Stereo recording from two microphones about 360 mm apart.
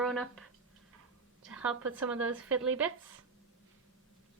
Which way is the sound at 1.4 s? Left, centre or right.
Centre.